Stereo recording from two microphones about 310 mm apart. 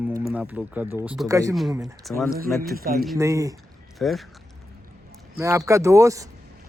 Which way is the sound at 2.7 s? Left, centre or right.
Right.